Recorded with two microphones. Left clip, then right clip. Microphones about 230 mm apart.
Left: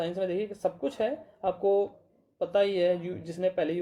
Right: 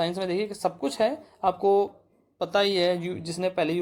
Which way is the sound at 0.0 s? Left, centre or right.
Centre.